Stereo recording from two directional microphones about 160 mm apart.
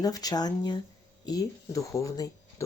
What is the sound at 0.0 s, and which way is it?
Speech, 25° left (ahead or behind).